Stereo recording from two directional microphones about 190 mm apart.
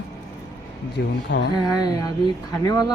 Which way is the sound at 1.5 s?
20° left (ahead or behind).